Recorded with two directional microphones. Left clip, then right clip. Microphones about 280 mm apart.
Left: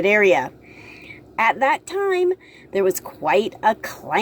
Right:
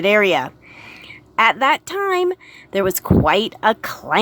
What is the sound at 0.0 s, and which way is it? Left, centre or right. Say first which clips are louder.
A woman's voice: right 1 dB; centre.